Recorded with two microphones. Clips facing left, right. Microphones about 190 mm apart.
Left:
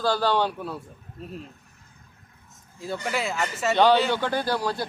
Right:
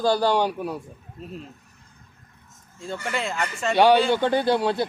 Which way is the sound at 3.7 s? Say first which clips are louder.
Right 3 dB; 10° right (ahead or behind).